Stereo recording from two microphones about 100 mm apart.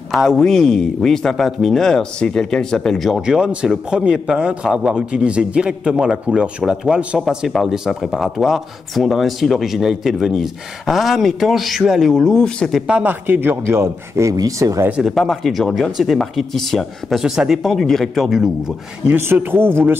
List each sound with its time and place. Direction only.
0.1 s a man's voice: centre (ahead or behind)
3.2 s a man's voice: 5° right (ahead or behind)
12.8 s speech: 15° right (ahead or behind)
14.3 s speech: 35° right (ahead or behind)
14.9 s a man's voice: 5° right (ahead or behind)
19.3 s speech: 20° right (ahead or behind)